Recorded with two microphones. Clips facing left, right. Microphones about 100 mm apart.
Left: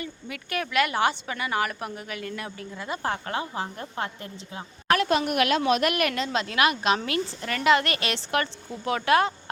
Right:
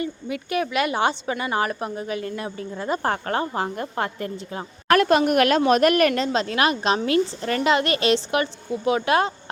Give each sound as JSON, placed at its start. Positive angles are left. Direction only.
{"t": 0.0, "sound": "a woman's voice", "side_deg": -25}